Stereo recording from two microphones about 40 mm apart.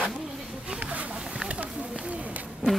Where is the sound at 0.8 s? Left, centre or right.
Right.